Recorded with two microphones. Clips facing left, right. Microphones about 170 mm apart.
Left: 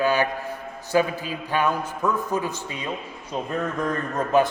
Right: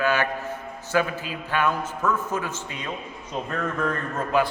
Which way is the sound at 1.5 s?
15° left (ahead or behind).